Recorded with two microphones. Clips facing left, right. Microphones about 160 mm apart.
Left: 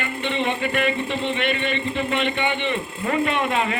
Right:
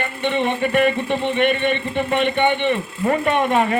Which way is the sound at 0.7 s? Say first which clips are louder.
Right 5 dB; 50° right (ahead or behind).